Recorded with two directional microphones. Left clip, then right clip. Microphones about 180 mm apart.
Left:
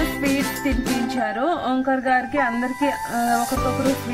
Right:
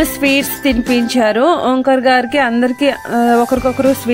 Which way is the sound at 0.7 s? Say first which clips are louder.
Right 9 dB; 50° right (ahead or behind).